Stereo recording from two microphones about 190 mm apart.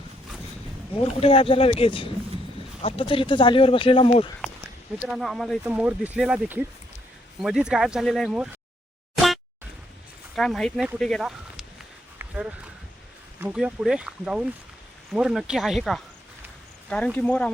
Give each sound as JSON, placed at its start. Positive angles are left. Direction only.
{"t": 0.9, "sound": "speech", "side_deg": 30}
{"t": 5.0, "sound": "speech", "side_deg": 0}
{"t": 9.1, "sound": "boing", "side_deg": 0}
{"t": 10.3, "sound": "speech", "side_deg": 0}